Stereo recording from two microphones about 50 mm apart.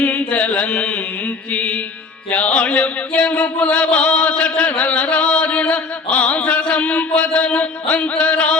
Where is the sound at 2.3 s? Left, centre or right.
Left.